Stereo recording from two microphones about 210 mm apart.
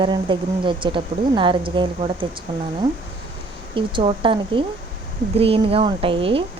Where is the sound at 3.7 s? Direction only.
25° right (ahead or behind).